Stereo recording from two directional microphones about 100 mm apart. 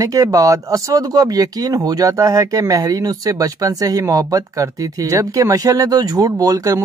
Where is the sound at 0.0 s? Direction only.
35° right (ahead or behind).